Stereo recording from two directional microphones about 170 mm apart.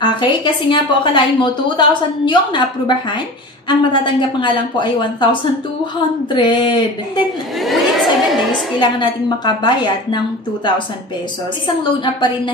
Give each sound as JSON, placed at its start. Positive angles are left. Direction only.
{"t": 0.0, "sound": "a woman's voice", "side_deg": 25}
{"t": 3.6, "sound": "a woman's voice", "side_deg": 30}
{"t": 7.6, "sound": "a sound", "side_deg": 0}
{"t": 8.7, "sound": "a woman's voice", "side_deg": 25}